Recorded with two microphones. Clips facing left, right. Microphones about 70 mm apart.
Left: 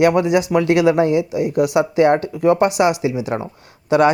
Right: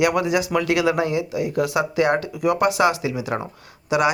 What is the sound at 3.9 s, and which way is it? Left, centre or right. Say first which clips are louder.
Speech: left 6 dB; left.